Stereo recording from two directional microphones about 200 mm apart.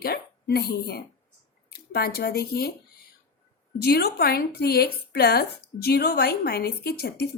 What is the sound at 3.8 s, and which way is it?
A woman's voice, 50° left (ahead or behind).